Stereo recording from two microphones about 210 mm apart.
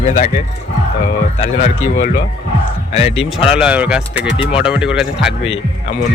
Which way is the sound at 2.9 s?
30° left (ahead or behind).